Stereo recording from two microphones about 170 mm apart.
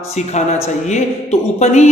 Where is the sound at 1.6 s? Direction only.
40° left (ahead or behind).